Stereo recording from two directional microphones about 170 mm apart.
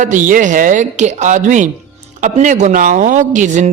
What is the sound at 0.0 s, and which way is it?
A man's voice, 50° right (ahead or behind).